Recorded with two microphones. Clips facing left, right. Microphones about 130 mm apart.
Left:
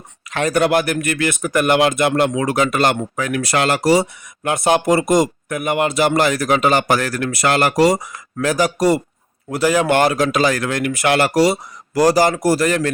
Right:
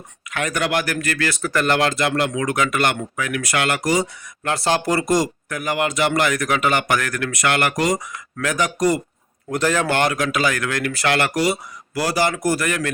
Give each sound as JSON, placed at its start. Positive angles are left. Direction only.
{"t": 0.3, "sound": "speech", "side_deg": 30}
{"t": 9.5, "sound": "speech", "side_deg": 10}
{"t": 9.9, "sound": "speech", "side_deg": 30}
{"t": 11.3, "sound": "speech", "side_deg": 35}